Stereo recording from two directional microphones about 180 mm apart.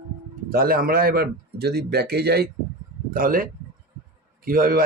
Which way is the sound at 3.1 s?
50° right (ahead or behind).